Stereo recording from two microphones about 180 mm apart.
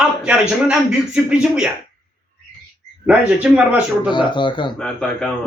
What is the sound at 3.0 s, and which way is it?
A man's voice, 5° right (ahead or behind).